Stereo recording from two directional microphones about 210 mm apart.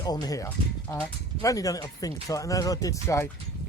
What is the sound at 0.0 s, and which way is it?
Speech, 20° left (ahead or behind).